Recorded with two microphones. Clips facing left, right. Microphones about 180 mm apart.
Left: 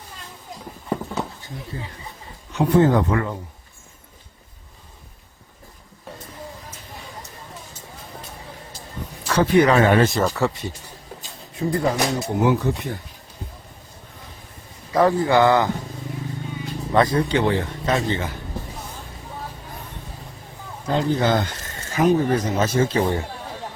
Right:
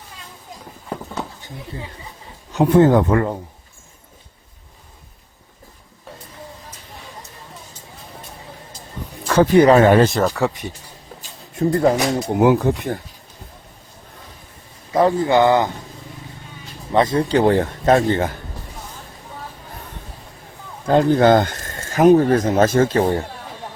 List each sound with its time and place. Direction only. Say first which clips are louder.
0.6 s clip-clop: left 4 dB; centre (ahead or behind)
2.5 s speech: right 4 dB; 45° right (ahead or behind)
9.2 s a sound: right 5 dB; 50° right (ahead or behind)
9.6 s speech: right 4 dB; 35° right (ahead or behind)
10.2 s speech: right 2 dB; 15° right (ahead or behind)
11.5 s speech: right 5 dB; 50° right (ahead or behind)
14.9 s speech: right 2 dB; 20° right (ahead or behind)
16.9 s speech: right 2 dB; 25° right (ahead or behind)
17.2 s speech: right 5 dB; 40° right (ahead or behind)
20.8 s speech: right 7 dB; 50° right (ahead or behind)